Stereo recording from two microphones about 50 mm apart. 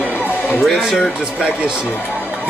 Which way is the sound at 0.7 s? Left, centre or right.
Centre.